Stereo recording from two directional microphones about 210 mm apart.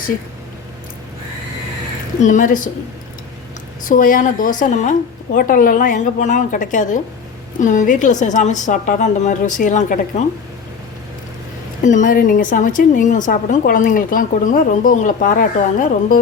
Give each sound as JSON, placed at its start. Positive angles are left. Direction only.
{"t": 2.2, "sound": "a woman's voice", "side_deg": 40}
{"t": 3.8, "sound": "a woman's voice", "side_deg": 40}
{"t": 11.8, "sound": "a woman's voice", "side_deg": 35}